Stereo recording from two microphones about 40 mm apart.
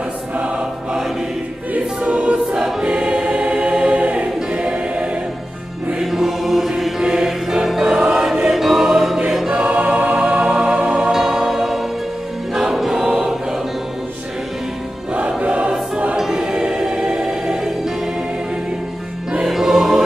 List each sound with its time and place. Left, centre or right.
1.7 s choir: right
2.8 s choir: right
5.9 s music: centre
7.0 s choir: centre
9.6 s music: right
9.8 s music: right
10.1 s music: right
11.1 s music: centre
13.0 s choir: right
15.1 s choir: right
16.2 s choir: centre
19.4 s music: centre